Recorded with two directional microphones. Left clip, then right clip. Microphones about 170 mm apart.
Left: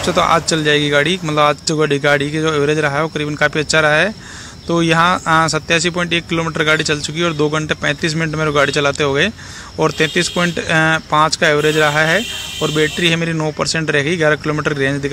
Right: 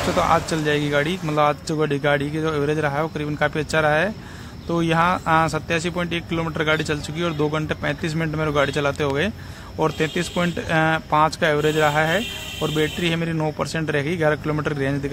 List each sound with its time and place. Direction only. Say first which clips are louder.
0.1 s speech: left 6 dB; 20° left (ahead or behind)